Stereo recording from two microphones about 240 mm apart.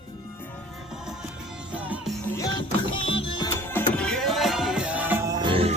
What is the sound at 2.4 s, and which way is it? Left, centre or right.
Music, centre.